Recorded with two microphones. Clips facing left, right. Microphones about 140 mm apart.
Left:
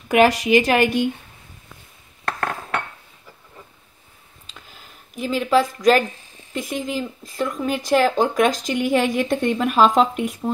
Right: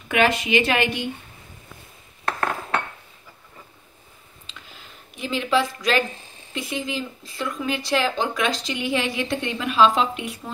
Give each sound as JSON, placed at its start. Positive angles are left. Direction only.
{"t": 0.1, "sound": "speech", "side_deg": 40}
{"t": 4.5, "sound": "a sound", "side_deg": 45}
{"t": 5.1, "sound": "speech", "side_deg": 45}